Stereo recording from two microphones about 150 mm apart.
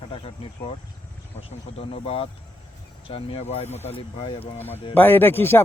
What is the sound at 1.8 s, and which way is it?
Speech, 40° left (ahead or behind).